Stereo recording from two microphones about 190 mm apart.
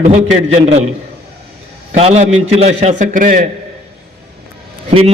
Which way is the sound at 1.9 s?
35° right (ahead or behind).